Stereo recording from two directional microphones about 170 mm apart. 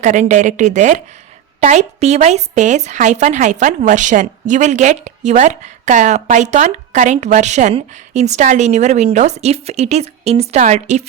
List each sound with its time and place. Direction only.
0.0 s speech: 45° right (ahead or behind)